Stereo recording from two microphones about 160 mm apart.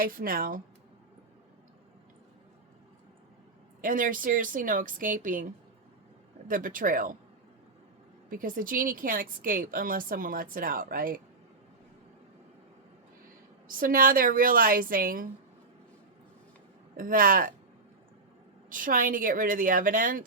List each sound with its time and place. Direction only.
0.0 s a woman's voice: 60° right (ahead or behind)
3.8 s a woman's voice: 60° right (ahead or behind)
6.5 s a woman's voice: 60° right (ahead or behind)
8.3 s a woman's voice: 60° right (ahead or behind)
13.7 s a woman's voice: 60° right (ahead or behind)
17.0 s a woman's voice: 60° right (ahead or behind)
18.7 s a woman's voice: 60° right (ahead or behind)